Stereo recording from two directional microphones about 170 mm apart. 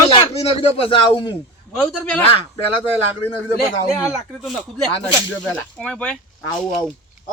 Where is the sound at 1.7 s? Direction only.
10° left (ahead or behind).